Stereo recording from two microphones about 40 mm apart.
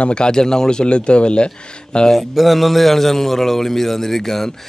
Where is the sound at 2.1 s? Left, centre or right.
Centre.